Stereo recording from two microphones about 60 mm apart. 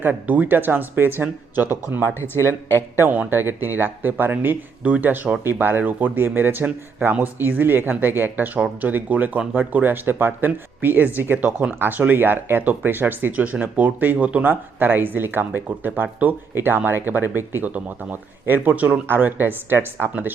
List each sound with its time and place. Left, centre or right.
0.0 s speech: right
2.2 s a man's voice: left
3.0 s speech: right
8.5 s speech: right
18.7 s speech: right
19.0 s speech: right